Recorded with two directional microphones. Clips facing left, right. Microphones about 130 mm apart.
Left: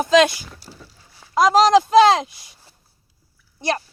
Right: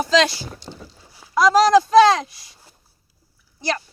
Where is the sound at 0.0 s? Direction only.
20° left (ahead or behind).